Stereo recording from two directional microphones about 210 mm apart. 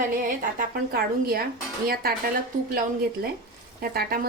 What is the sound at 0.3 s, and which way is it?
A woman's voice, 40° right (ahead or behind).